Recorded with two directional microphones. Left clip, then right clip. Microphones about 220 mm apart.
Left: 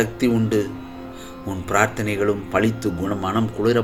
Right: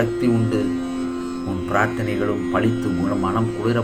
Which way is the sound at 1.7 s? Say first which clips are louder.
Left 1 dB; 50° left (ahead or behind).